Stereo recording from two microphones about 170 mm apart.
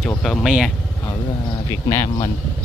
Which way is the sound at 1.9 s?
15° left (ahead or behind).